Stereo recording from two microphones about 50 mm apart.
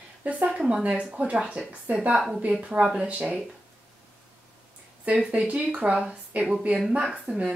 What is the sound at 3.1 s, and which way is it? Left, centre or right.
Speech, right.